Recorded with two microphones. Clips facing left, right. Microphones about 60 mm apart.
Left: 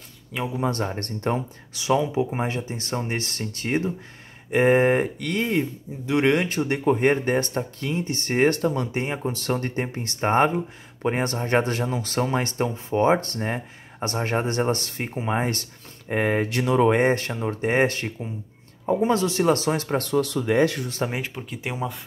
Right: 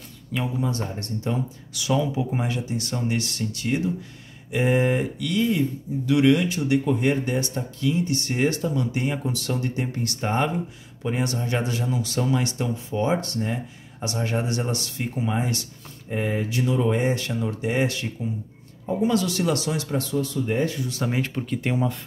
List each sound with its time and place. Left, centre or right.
0.6 s speech: left
1.7 s speech: left
8.9 s speech: left
18.9 s speech: left
20.0 s speech: left
21.3 s speech: centre